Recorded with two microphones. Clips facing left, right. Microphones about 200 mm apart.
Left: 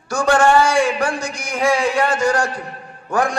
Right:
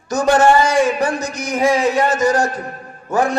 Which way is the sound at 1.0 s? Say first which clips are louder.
Right 2 dB; 10° left (ahead or behind).